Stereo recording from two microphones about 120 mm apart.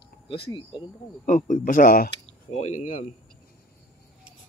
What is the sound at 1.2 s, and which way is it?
Speech, 90° left.